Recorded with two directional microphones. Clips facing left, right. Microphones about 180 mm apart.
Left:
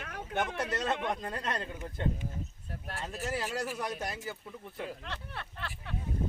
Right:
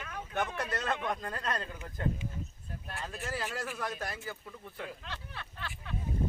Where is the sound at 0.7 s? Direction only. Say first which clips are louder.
Left 1 dB; 20° left (ahead or behind).